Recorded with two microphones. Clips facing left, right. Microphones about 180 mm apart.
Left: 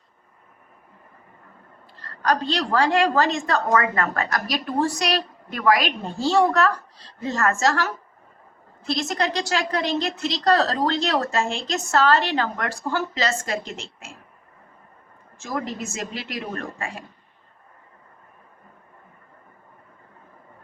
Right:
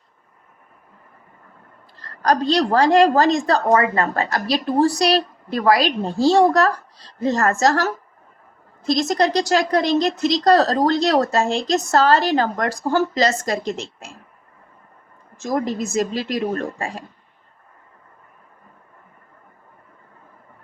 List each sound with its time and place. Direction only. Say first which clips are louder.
2.0 s a woman's voice: right 4 dB; 40° right (ahead or behind)
15.4 s a woman's voice: right 7 dB; 40° right (ahead or behind)